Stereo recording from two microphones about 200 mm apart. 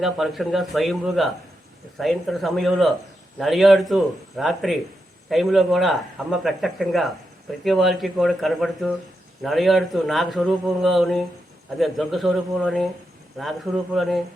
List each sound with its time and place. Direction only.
0.0 s speech: centre (ahead or behind)